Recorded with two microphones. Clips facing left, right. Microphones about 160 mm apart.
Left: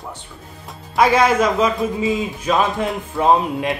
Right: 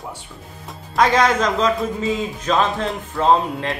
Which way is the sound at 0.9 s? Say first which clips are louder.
Left 2 dB; 10° left (ahead or behind).